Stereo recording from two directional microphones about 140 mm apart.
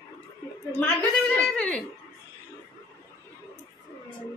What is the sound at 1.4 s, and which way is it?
Speech, 10° left (ahead or behind).